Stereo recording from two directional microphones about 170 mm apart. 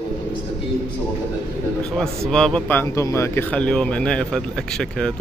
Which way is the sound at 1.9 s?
5° left (ahead or behind).